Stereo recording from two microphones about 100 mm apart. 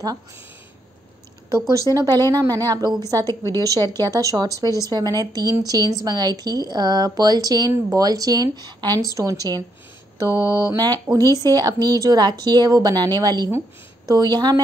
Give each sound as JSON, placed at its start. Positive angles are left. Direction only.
{"t": 2.0, "sound": "a woman's voice", "side_deg": -40}